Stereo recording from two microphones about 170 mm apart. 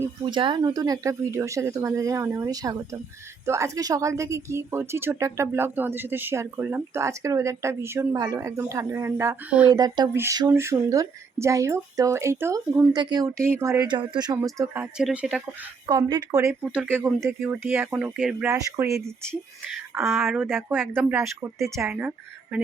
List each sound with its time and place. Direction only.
0.0 s speech: 25° right (ahead or behind); by 9.7 s 5° right (ahead or behind)
9.7 s speech: 25° right (ahead or behind); by 15.4 s 10° right (ahead or behind)
15.9 s speech: 25° right (ahead or behind)
19.9 s speech: centre (ahead or behind)